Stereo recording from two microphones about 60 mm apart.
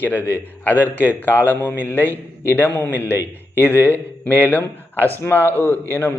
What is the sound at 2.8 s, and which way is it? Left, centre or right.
A man's voice, left.